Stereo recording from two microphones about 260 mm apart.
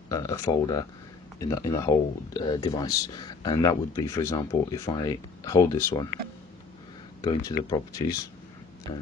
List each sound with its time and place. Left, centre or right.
0.1 s speech: centre
7.2 s speech: centre